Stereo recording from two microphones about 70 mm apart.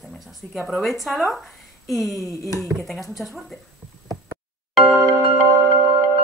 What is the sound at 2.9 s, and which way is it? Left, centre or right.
Speech, centre.